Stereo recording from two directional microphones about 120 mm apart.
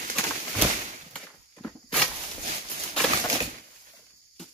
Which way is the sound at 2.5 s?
80° right.